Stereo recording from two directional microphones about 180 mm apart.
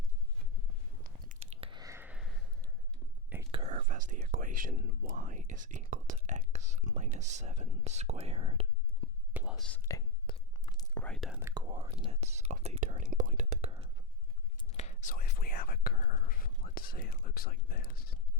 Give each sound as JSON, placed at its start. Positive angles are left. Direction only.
{"t": 1.3, "sound": "biting", "side_deg": -45}
{"t": 1.6, "sound": "sniff", "side_deg": -20}
{"t": 3.5, "sound": "whispering", "side_deg": -35}
{"t": 5.9, "sound": "speech", "side_deg": -45}
{"t": 9.3, "sound": "whispering", "side_deg": -5}
{"t": 9.9, "sound": "speech", "side_deg": 20}
{"t": 10.2, "sound": "whispering", "side_deg": 20}
{"t": 11.0, "sound": "speech", "side_deg": 0}
{"t": 11.3, "sound": "speech", "side_deg": -15}
{"t": 11.7, "sound": "speech", "side_deg": -30}
{"t": 13.7, "sound": "whispering", "side_deg": -35}
{"t": 14.7, "sound": "speech", "side_deg": 35}